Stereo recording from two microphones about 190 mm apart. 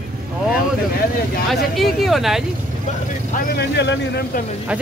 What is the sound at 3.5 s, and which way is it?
Speech, 60° left (ahead or behind).